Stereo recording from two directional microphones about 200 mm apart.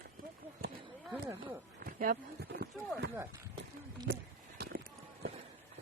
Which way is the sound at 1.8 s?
45° right (ahead or behind).